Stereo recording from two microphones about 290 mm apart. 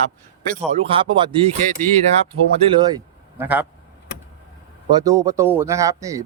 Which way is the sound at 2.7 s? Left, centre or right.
Centre.